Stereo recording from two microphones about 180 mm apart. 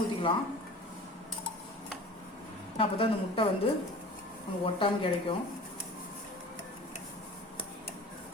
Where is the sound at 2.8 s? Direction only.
30° left (ahead or behind).